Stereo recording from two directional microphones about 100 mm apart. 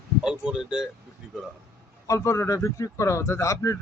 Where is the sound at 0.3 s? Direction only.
10° right (ahead or behind).